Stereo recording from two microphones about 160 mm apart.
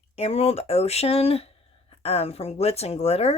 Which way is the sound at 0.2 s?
40° left (ahead or behind).